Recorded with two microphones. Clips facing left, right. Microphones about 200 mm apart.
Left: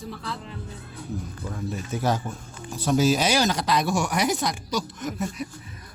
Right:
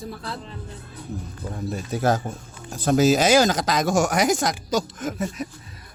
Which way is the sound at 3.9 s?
90° right.